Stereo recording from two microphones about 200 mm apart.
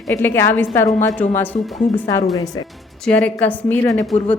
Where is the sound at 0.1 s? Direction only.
10° left (ahead or behind).